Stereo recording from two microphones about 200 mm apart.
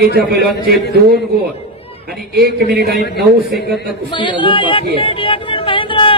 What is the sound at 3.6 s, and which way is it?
Speech, 55° right (ahead or behind).